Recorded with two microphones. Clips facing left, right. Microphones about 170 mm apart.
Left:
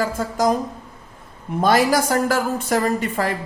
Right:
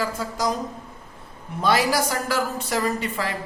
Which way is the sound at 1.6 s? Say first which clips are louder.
Left 4 dB; 45° left (ahead or behind).